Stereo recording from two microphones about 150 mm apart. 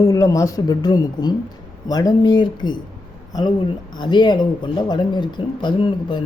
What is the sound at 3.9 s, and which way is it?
Speech, 30° left (ahead or behind).